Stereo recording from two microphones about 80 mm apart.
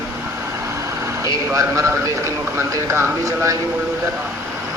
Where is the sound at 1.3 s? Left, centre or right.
Right.